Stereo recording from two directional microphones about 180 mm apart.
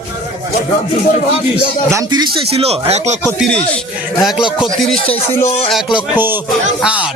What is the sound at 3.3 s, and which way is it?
Speech, centre (ahead or behind).